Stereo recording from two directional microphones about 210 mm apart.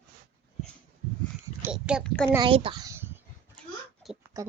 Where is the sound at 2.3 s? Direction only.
25° right (ahead or behind).